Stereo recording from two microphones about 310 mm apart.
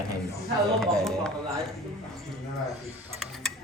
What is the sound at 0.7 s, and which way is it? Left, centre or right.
Speech, centre.